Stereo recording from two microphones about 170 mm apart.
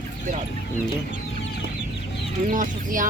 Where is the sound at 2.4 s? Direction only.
50° right (ahead or behind).